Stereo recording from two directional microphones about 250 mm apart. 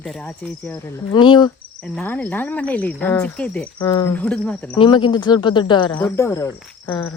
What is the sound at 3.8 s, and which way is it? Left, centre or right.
Speech, centre.